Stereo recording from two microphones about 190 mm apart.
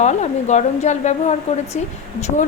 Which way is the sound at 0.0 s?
35° left (ahead or behind).